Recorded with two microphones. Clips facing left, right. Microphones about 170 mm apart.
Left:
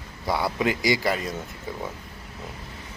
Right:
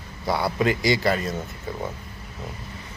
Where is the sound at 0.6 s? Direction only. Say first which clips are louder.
Right 3 dB; 15° left (ahead or behind).